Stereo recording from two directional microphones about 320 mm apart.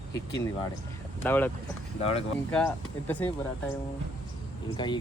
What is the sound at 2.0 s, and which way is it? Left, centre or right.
Speech, centre.